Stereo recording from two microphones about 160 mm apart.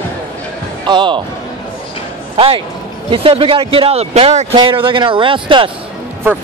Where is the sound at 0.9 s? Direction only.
30° right (ahead or behind).